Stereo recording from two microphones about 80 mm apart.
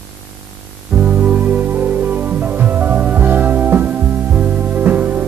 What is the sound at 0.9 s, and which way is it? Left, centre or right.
Music, centre.